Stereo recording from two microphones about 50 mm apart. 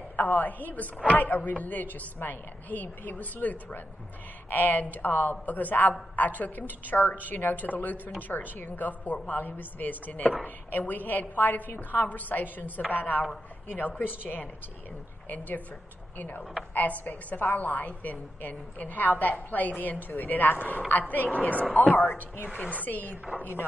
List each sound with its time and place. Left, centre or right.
0.1 s a woman's voice: left
21.9 s a woman's voice: left
22.5 s a woman's voice: left